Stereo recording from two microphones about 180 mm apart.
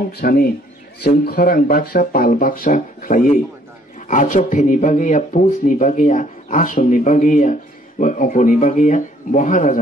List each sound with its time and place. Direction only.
0.2 s speech: 55° left (ahead or behind)